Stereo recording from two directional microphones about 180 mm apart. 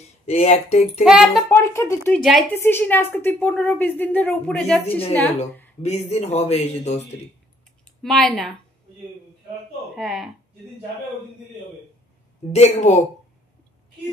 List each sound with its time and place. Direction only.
0.3 s speech: 35° left (ahead or behind)
1.0 s speech: centre (ahead or behind)
1.5 s a woman's voice: 15° left (ahead or behind)
5.8 s speech: 35° left (ahead or behind)
8.0 s speech: 5° left (ahead or behind)
9.9 s speech: centre (ahead or behind)
12.5 s speech: 40° left (ahead or behind)